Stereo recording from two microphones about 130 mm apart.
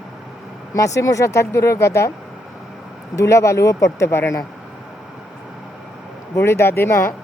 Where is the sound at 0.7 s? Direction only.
25° left (ahead or behind).